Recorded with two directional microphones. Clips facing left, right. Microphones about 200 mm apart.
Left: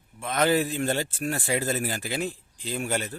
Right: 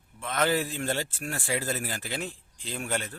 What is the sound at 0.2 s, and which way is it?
A man's voice, 15° left (ahead or behind).